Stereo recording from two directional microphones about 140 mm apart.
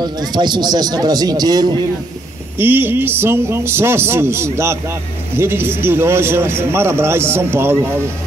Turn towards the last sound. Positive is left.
turn(degrees=-15)  # may be behind; listen again after turning